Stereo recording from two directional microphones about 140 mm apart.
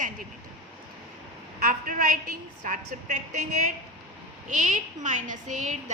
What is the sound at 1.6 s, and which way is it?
A woman's voice, 70° right (ahead or behind).